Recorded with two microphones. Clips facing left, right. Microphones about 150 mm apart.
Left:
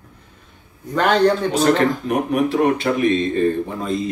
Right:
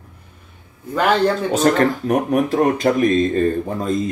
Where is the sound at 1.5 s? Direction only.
40° right (ahead or behind).